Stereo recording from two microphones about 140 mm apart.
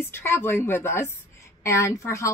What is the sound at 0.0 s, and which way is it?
Speech, 15° left (ahead or behind).